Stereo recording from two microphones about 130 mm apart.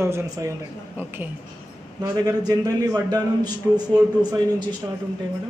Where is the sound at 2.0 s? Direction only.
30° right (ahead or behind).